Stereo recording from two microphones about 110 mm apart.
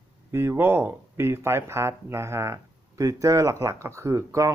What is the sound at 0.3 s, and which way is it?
Speech, 25° right (ahead or behind).